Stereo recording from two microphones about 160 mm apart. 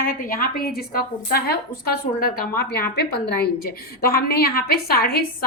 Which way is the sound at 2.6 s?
75° left (ahead or behind).